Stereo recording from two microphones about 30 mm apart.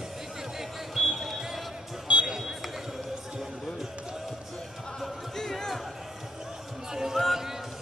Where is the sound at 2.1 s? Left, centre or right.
Right.